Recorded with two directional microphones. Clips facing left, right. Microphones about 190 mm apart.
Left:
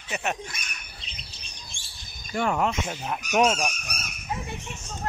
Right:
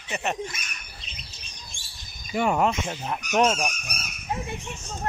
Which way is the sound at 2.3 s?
10° right (ahead or behind).